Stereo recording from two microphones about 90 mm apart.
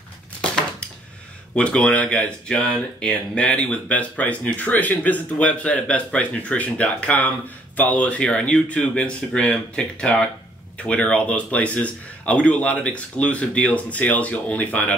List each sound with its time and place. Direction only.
0.4 s dishes: 10° left (ahead or behind)
1.5 s speech: 15° left (ahead or behind)